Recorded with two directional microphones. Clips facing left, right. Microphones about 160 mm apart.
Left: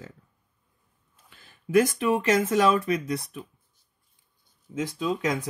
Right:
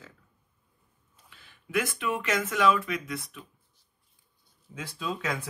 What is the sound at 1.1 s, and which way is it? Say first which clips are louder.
Speech: left 1 dB; 45° left (ahead or behind).